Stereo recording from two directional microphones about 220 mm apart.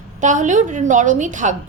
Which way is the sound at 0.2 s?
35° right (ahead or behind).